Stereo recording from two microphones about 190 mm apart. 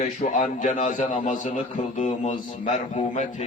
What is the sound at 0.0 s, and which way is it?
A man's voice, 40° left (ahead or behind).